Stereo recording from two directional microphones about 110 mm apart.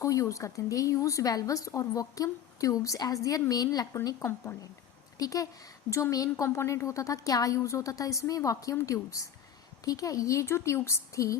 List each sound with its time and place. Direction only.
0.0 s a woman's voice: 30° left (ahead or behind)